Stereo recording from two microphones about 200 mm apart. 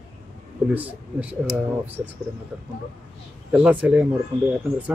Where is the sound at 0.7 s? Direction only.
5° right (ahead or behind).